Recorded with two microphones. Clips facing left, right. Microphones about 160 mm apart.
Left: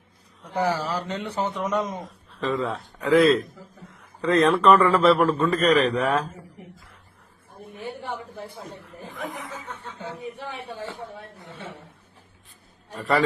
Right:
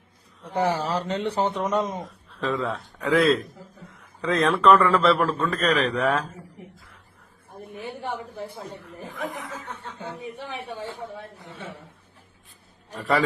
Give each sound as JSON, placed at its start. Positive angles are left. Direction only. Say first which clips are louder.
{"t": 0.5, "sound": "a man's voice", "louder": "right 1 dB", "side_deg": -25}
{"t": 2.0, "sound": "a man's voice", "louder": "even", "side_deg": 0}
{"t": 8.1, "sound": "a sound", "louder": "right 1 dB", "side_deg": -10}
{"t": 8.8, "sound": "speech", "louder": "right 2 dB", "side_deg": 0}
{"t": 12.9, "sound": "a man's voice", "louder": "left 1 dB", "side_deg": 0}